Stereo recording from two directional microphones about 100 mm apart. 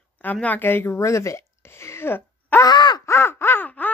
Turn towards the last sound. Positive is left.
turn(degrees=15)  # may be behind; listen again after turning